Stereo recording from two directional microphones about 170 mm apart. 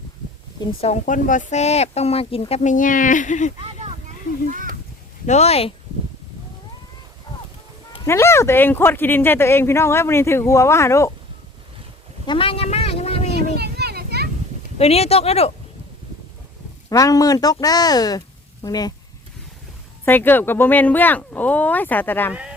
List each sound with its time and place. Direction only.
0.6 s speech: 35° left (ahead or behind)
1.0 s speech: 50° left (ahead or behind)
3.6 s a sound: 35° right (ahead or behind)
5.2 s speech: 40° left (ahead or behind)
8.0 s speech: 15° left (ahead or behind)
12.2 s a sound: 30° left (ahead or behind)
13.6 s children playing: 70° right (ahead or behind)
14.8 s speech: 35° left (ahead or behind)
16.9 s speech: 20° left (ahead or behind)
20.1 s speech: 10° left (ahead or behind)
22.3 s speech: 5° right (ahead or behind)